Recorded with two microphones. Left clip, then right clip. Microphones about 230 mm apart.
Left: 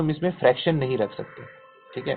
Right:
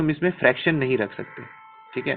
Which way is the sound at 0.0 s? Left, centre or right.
Right.